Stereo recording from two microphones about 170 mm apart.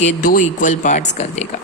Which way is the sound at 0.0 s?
50° left (ahead or behind).